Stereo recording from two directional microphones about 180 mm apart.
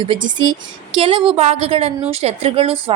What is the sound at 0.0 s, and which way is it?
A woman's voice, 25° right (ahead or behind).